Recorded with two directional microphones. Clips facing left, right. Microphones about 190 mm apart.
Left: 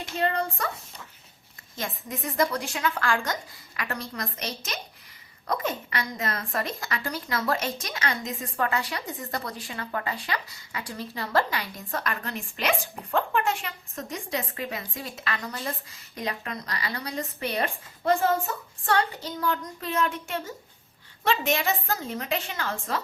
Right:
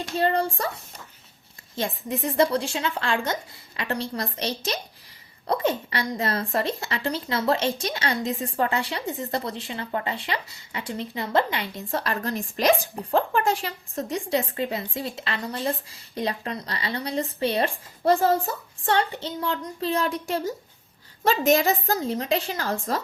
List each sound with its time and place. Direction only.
0.2 s a woman's voice: 30° right (ahead or behind)
1.7 s a woman's voice: 30° right (ahead or behind)